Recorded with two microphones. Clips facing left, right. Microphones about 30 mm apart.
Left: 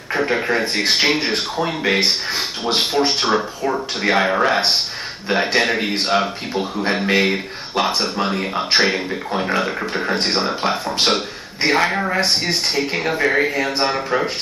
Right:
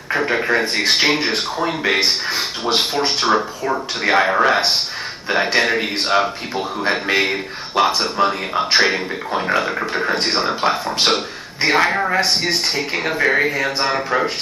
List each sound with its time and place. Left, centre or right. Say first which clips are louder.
0.1 s speech: right 1 dB; centre